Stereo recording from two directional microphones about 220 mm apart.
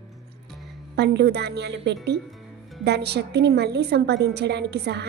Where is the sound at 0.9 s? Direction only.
50° right (ahead or behind).